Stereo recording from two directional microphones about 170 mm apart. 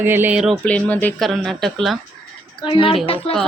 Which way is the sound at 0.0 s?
10° right (ahead or behind).